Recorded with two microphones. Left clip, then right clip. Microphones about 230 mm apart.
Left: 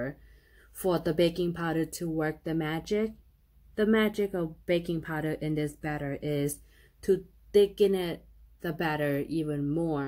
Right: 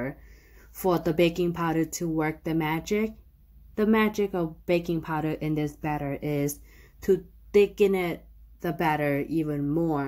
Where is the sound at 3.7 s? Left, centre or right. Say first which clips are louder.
Right 2 dB; right.